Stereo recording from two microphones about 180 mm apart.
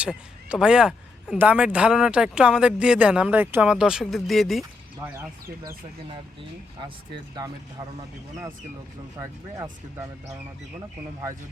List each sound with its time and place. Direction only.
0.0 s speech: 5° right (ahead or behind)
7.3 s speech: 20° right (ahead or behind)
9.1 s speech: 15° right (ahead or behind)